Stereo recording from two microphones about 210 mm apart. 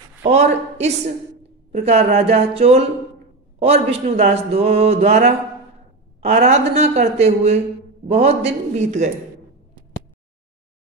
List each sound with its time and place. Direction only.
0.2 s a woman's voice: 30° right (ahead or behind)